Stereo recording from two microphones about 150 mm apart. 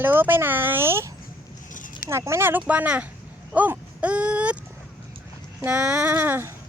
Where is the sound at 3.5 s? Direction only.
10° right (ahead or behind).